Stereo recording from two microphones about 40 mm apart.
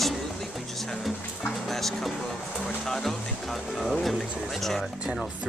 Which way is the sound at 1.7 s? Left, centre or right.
Centre.